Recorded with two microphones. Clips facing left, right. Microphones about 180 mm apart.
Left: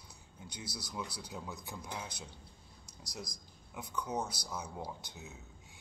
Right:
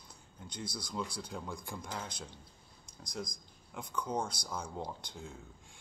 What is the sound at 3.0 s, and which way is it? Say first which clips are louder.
Speech: right 5 dB; 50° right (ahead or behind).